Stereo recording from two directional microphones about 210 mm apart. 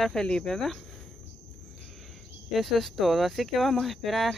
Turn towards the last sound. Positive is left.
turn(degrees=0)  # may be behind; listen again after turning